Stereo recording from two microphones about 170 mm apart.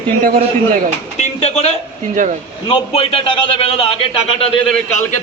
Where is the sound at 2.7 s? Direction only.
35° left (ahead or behind).